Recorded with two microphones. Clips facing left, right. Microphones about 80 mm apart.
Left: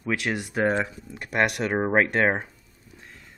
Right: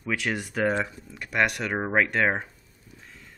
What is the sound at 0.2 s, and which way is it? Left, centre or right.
Speech, centre.